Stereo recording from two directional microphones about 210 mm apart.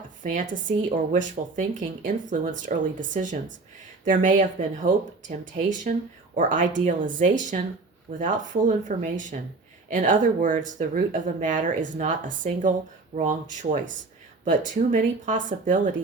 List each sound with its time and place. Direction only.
0.2 s speech: 35° right (ahead or behind)
4.1 s speech: 40° right (ahead or behind)